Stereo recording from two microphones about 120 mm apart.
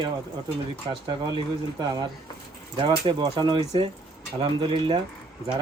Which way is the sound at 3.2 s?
40° right (ahead or behind).